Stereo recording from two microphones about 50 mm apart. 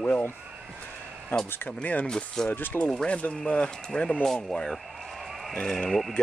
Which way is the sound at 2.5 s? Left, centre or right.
Left.